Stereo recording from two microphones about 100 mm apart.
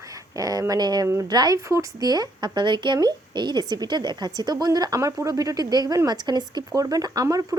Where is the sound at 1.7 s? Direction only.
30° right (ahead or behind).